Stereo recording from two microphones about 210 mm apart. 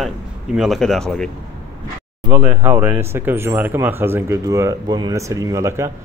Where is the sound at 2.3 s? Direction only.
10° right (ahead or behind).